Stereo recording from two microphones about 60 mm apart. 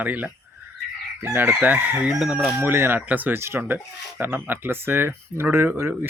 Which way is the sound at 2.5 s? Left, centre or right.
Right.